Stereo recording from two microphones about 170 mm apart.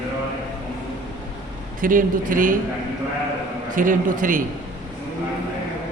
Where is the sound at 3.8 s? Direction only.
50° right (ahead or behind).